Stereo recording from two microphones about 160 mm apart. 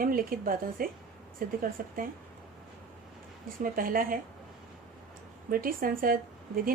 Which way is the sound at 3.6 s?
60° right (ahead or behind).